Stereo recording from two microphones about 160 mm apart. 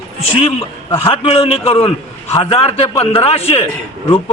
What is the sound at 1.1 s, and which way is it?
A man's voice, 35° left (ahead or behind).